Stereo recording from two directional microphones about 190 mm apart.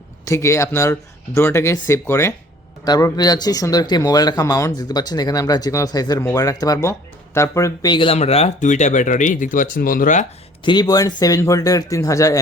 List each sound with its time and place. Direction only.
0.3 s speech: 15° left (ahead or behind); by 10.2 s 45° left (ahead or behind)
10.6 s speech: 25° left (ahead or behind)